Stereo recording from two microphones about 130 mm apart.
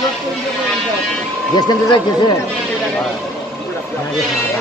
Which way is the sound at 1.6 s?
30° left (ahead or behind).